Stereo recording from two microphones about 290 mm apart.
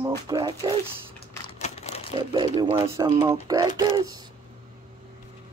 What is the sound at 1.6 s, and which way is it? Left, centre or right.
Typewriter, left.